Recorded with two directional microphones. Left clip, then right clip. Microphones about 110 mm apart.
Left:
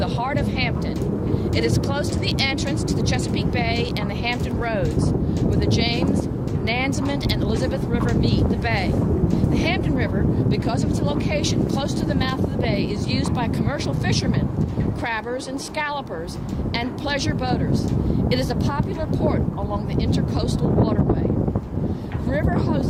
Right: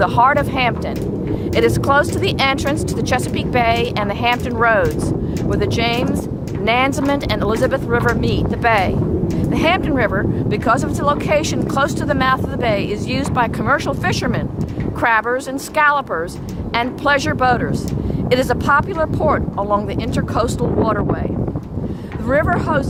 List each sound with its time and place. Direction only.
0.0 s speech: 30° right (ahead or behind)
15.7 s speech: 30° right (ahead or behind)
22.3 s speech: 30° right (ahead or behind)